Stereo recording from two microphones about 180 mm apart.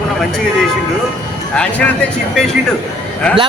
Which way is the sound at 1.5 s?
5° left (ahead or behind).